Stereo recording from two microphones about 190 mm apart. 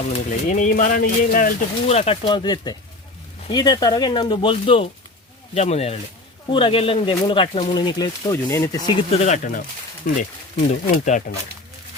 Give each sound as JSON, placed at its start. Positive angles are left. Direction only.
{"t": 0.1, "sound": "speech", "side_deg": 40}
{"t": 9.1, "sound": "speech", "side_deg": 35}